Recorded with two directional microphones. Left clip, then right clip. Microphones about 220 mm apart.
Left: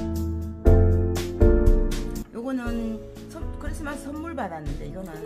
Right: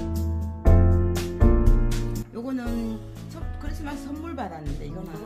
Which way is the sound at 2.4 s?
20° left (ahead or behind).